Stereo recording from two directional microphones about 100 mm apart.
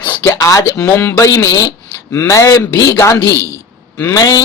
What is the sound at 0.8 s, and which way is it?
Speech, 25° left (ahead or behind).